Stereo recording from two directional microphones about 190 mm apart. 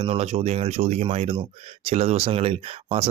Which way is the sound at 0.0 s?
30° right (ahead or behind).